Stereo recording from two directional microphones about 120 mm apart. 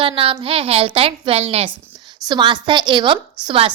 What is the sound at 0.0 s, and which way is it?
A woman's voice, 50° right (ahead or behind).